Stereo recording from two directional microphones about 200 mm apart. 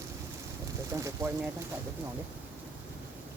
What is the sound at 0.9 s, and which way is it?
Speech, 15° right (ahead or behind).